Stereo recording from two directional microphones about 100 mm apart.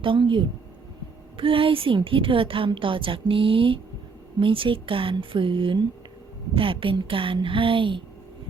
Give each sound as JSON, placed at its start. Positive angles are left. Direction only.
{"t": 0.0, "sound": "a woman's voice", "side_deg": -55}